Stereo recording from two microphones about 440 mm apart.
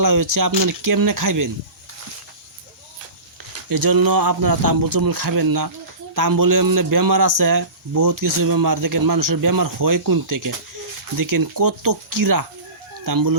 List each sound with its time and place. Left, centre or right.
0.0 s speech: right
3.7 s speech: right